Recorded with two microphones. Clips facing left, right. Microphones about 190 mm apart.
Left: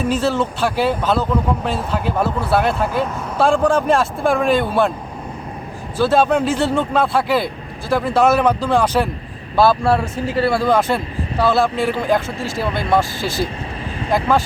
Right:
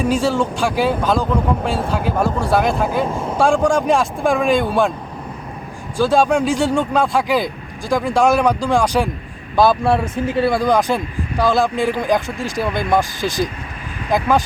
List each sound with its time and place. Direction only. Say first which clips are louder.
0.1 s speech: right 1 dB; 15° right (ahead or behind)
3.1 s speech: right 4 dB; 30° right (ahead or behind)
3.3 s speech: even; 15° right (ahead or behind)
6.0 s speech: even; 10° right (ahead or behind)